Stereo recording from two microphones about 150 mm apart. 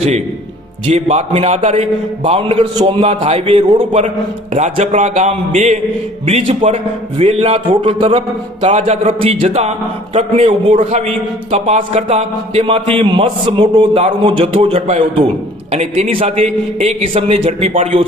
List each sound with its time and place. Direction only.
0.9 s a man's voice: 45° right (ahead or behind)
4.5 s a man's voice: 50° right (ahead or behind)